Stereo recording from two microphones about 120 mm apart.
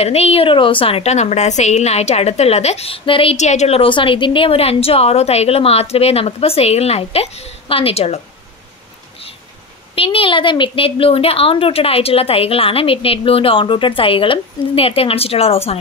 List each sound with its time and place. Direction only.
0.0 s a woman's voice: 60° left (ahead or behind)
3.3 s a woman's voice: 70° left (ahead or behind)
9.9 s a woman's voice: 50° left (ahead or behind)